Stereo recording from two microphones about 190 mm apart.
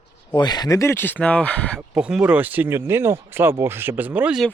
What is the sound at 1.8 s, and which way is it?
Speech, 5° right (ahead or behind).